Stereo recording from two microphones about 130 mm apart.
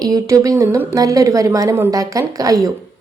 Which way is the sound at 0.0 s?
25° right (ahead or behind).